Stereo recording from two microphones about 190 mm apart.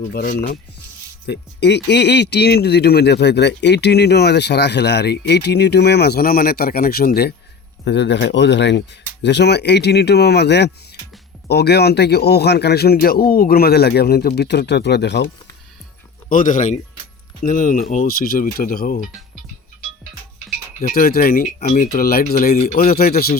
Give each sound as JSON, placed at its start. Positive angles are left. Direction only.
{"t": 0.1, "sound": "speech", "side_deg": 55}
{"t": 7.9, "sound": "speech", "side_deg": 65}
{"t": 16.3, "sound": "speech", "side_deg": 45}
{"t": 20.8, "sound": "speech", "side_deg": 50}